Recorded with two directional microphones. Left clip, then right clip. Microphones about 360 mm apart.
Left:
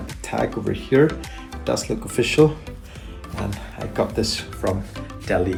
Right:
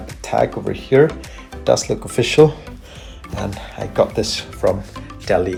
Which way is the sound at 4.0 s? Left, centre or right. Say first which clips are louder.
Right 5 dB; centre.